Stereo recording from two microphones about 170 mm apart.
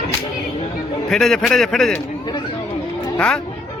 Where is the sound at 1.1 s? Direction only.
5° left (ahead or behind).